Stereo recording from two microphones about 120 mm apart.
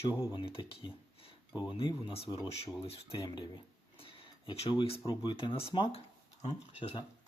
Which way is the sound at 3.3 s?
45° left (ahead or behind).